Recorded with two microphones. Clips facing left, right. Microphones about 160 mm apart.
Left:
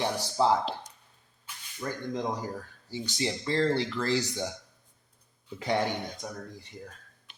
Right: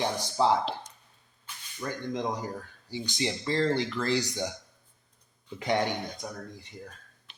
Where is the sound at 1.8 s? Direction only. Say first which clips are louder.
Even; 20° right (ahead or behind).